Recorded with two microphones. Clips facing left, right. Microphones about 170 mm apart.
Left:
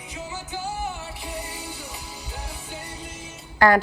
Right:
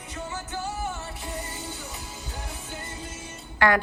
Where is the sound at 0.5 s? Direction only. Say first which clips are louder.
Left 2 dB; 10° left (ahead or behind).